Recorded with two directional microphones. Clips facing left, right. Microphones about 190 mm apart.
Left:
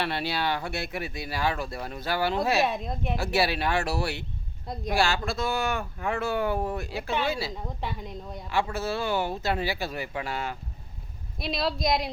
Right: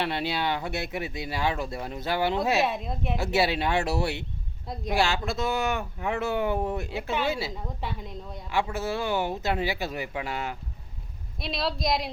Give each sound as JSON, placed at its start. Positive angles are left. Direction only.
{"t": 0.0, "sound": "speech", "side_deg": -20}
{"t": 2.6, "sound": "a woman's voice", "side_deg": 0}
{"t": 3.2, "sound": "speech", "side_deg": -20}
{"t": 4.7, "sound": "a woman's voice", "side_deg": 0}
{"t": 4.9, "sound": "speech", "side_deg": -20}
{"t": 7.5, "sound": "a woman's voice", "side_deg": 0}
{"t": 8.5, "sound": "speech", "side_deg": -15}
{"t": 11.3, "sound": "a woman's voice", "side_deg": 0}